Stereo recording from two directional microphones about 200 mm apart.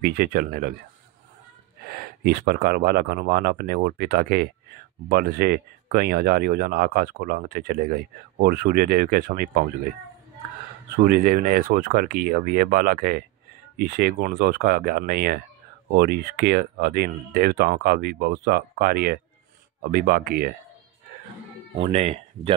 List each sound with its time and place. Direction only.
0.0 s speech: 50° right (ahead or behind)
1.8 s speech: 50° right (ahead or behind)
11.1 s speech: 45° right (ahead or behind)
21.7 s speech: 30° right (ahead or behind)